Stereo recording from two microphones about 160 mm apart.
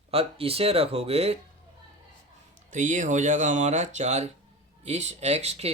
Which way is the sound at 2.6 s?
50° right (ahead or behind).